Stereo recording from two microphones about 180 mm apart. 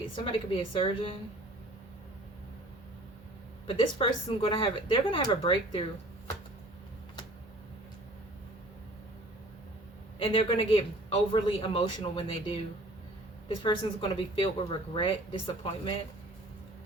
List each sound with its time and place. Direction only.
0.3 s speech: 30° left (ahead or behind)
3.7 s speech: 30° left (ahead or behind)
10.2 s speech: 30° left (ahead or behind)
13.6 s speech: 30° left (ahead or behind)